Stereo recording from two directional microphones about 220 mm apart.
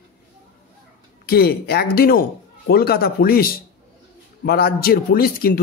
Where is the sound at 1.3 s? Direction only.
45° left (ahead or behind).